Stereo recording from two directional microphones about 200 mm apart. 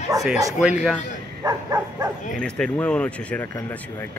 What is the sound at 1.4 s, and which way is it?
Dog, 15° right (ahead or behind).